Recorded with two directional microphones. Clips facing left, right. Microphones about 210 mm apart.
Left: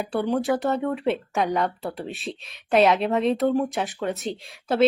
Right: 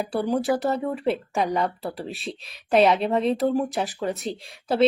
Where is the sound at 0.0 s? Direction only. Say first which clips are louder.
Even; 5° right (ahead or behind).